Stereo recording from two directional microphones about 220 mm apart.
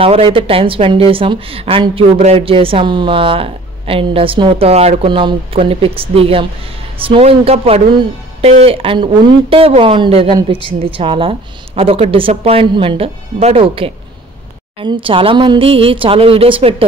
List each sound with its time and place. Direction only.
0.0 s a woman's voice: 25° right (ahead or behind)